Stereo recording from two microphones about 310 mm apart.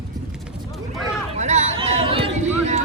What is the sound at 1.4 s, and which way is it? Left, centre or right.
Chatter, right.